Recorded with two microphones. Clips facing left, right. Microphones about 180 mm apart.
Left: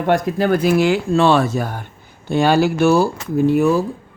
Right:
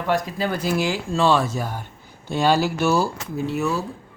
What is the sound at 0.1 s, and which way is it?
A man's voice, 55° left (ahead or behind).